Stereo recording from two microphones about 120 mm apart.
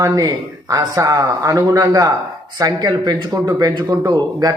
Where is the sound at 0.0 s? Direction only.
30° right (ahead or behind).